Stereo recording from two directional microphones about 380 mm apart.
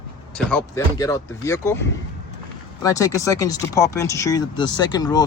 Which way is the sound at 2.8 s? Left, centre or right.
Centre.